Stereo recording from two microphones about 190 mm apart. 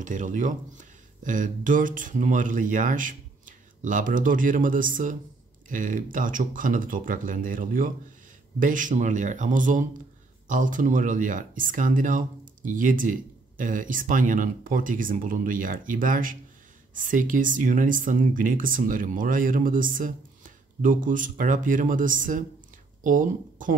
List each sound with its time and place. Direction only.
0.0 s speech: 40° right (ahead or behind)